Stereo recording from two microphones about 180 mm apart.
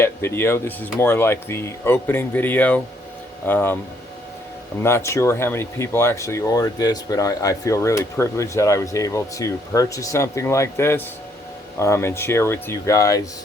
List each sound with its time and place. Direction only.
0.0 s speech: 15° left (ahead or behind)
4.8 s speech: 15° left (ahead or behind)